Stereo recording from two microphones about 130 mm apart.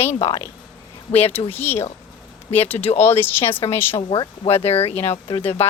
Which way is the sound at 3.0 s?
15° left (ahead or behind).